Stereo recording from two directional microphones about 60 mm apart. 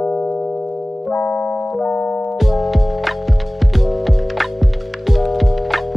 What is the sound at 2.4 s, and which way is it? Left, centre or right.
Music, centre.